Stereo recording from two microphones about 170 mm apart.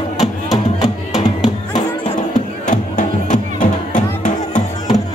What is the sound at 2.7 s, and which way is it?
Music, 50° left (ahead or behind).